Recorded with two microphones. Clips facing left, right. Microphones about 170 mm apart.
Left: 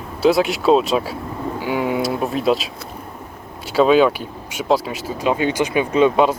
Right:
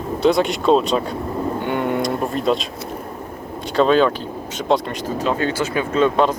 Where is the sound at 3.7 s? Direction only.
5° left (ahead or behind).